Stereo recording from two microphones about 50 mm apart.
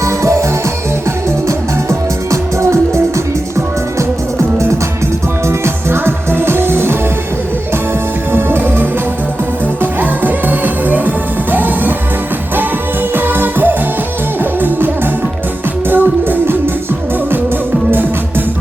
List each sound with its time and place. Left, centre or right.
0.0 s music: right
1.5 s music: right
5.5 s music: right
8.3 s music: right
13.1 s music: right
15.9 s music: right